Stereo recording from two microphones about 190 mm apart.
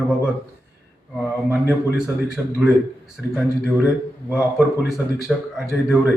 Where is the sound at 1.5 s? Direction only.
10° right (ahead or behind).